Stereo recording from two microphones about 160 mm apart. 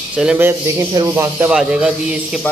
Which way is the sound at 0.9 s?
25° right (ahead or behind).